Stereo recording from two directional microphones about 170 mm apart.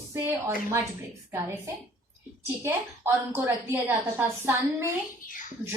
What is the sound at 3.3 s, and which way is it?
A woman's voice, 15° right (ahead or behind).